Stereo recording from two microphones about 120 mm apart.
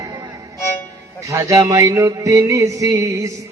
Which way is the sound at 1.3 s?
25° right (ahead or behind).